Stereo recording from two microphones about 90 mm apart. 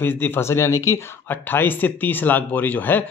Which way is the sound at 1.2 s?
20° left (ahead or behind).